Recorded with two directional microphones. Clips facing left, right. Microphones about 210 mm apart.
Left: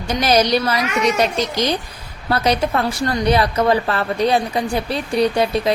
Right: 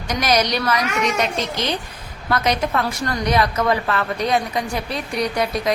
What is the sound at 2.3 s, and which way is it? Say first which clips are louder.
A woman's voice: left 2 dB; 30° left (ahead or behind).